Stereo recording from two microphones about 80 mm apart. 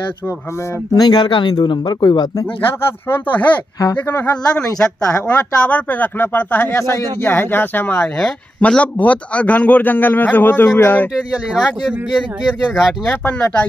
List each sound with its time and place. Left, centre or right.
0.9 s speech: left
3.1 s a man's voice: centre
6.8 s speech: left
7.2 s a man's voice: left
11.6 s speech: centre
13.1 s speech: centre